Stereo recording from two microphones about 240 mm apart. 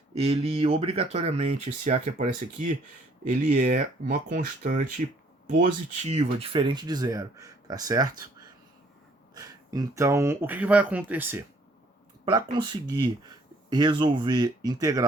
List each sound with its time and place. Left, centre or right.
0.2 s speech: right
9.3 s speech: centre